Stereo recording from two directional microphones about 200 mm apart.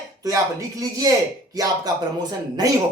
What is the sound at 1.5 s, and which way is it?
Speech, 20° right (ahead or behind).